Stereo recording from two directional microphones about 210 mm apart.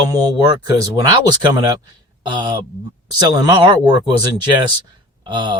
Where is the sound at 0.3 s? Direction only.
20° right (ahead or behind).